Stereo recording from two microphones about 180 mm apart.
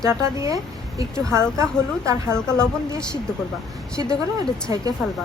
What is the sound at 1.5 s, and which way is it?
Speech, 15° right (ahead or behind).